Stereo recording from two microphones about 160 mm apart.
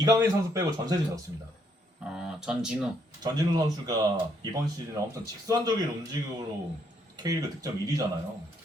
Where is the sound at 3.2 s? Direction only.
25° right (ahead or behind).